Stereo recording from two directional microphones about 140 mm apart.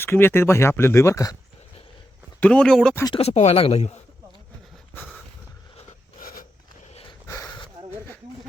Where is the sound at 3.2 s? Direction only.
50° left (ahead or behind).